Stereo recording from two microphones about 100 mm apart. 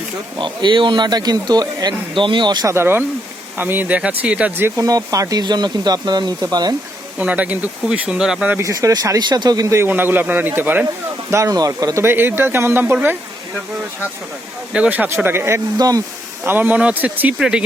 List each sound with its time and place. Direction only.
0.3 s a man's voice: 50° right (ahead or behind)
2.6 s a man's voice: 25° right (ahead or behind)
4.8 s a man's voice: 35° right (ahead or behind)
7.2 s speech: 15° right (ahead or behind)
8.5 s speech: 30° right (ahead or behind)
9.7 s a man's voice: 20° right (ahead or behind)
11.3 s speech: 30° right (ahead or behind)
12.0 s a man's voice: 20° right (ahead or behind)
14.7 s a man's voice: 15° right (ahead or behind)
15.8 s speech: 35° right (ahead or behind)
16.4 s speech: 20° right (ahead or behind)